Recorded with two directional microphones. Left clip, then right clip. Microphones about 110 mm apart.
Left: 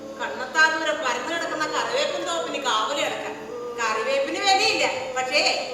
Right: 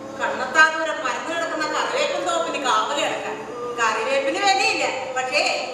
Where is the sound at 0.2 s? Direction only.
45° right (ahead or behind).